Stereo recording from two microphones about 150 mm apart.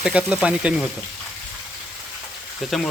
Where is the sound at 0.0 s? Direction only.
5° right (ahead or behind).